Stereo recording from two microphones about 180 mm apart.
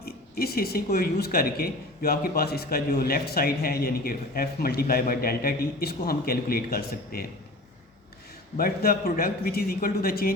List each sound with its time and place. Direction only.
0.0 s speech: 60° left (ahead or behind)
8.5 s speech: 55° left (ahead or behind)